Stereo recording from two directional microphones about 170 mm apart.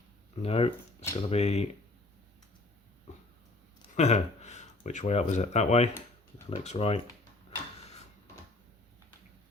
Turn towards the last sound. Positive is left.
turn(degrees=40)  # may be behind; listen again after turning